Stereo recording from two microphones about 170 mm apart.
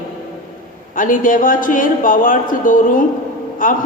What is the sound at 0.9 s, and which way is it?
A woman's voice, 50° left (ahead or behind).